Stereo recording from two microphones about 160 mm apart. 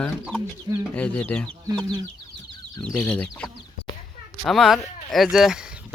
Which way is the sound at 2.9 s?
10° left (ahead or behind).